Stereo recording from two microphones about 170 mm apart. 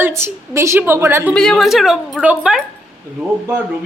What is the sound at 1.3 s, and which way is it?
A woman's voice, 5° left (ahead or behind).